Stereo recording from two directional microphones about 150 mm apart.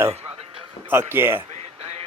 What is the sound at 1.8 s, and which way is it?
Music, 40° right (ahead or behind).